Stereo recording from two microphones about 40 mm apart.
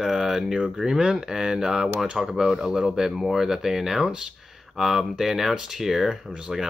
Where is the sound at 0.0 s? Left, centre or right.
Centre.